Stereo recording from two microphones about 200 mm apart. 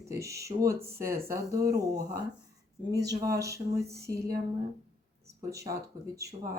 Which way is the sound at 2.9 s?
20° right (ahead or behind).